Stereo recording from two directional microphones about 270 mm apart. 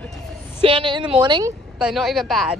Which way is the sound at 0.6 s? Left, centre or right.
Centre.